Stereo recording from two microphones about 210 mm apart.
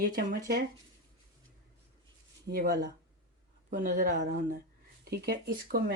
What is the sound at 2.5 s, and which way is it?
Speech, 50° right (ahead or behind).